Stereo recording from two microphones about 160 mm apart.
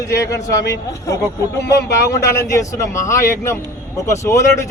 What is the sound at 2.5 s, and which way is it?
Speech, 20° left (ahead or behind).